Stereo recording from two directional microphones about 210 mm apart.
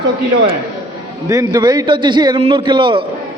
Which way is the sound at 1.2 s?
15° right (ahead or behind).